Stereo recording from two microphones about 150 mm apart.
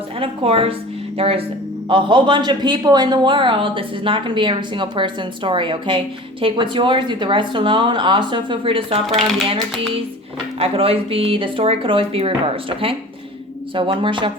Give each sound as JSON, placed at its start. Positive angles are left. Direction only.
{"t": 0.2, "sound": "a woman's voice", "side_deg": -40}
{"t": 10.6, "sound": "a woman's voice", "side_deg": -40}